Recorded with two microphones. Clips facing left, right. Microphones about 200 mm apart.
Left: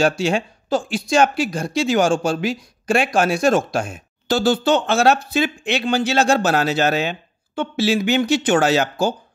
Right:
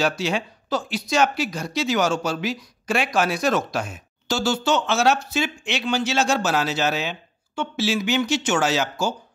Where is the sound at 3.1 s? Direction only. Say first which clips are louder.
Left 4 dB; 50° left (ahead or behind).